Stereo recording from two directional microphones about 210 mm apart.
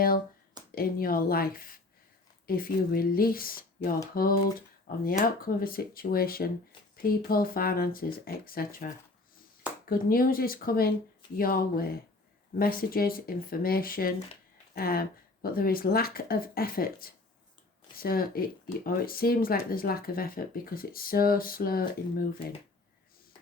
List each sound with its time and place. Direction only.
0.8 s speech: 45° left (ahead or behind)